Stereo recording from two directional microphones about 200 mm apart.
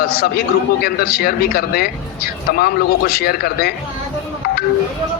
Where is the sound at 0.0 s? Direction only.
50° left (ahead or behind).